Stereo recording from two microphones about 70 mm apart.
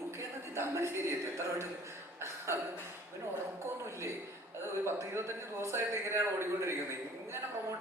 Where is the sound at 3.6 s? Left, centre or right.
Right.